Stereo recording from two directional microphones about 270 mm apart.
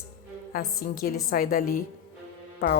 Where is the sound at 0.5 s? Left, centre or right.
Left.